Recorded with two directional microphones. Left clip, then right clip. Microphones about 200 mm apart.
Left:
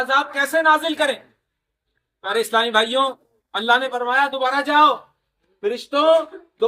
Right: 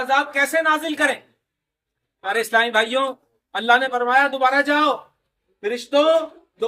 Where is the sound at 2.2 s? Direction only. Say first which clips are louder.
Even; 5° right (ahead or behind).